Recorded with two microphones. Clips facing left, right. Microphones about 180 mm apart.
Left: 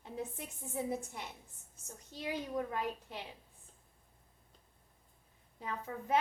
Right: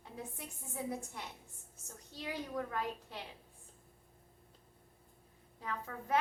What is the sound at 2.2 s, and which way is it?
Child singing, 20° left (ahead or behind).